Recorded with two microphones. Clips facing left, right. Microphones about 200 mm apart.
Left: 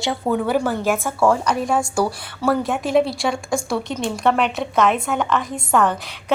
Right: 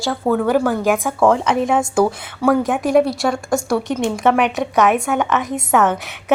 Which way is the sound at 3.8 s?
15° right (ahead or behind).